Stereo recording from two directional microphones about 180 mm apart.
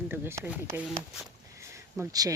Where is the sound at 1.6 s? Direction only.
15° right (ahead or behind).